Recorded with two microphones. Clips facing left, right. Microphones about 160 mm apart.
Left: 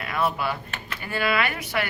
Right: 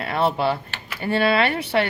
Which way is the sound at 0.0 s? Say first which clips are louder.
Right 5 dB; 30° right (ahead or behind).